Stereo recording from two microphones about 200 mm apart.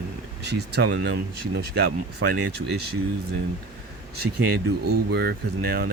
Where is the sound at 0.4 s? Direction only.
55° right (ahead or behind).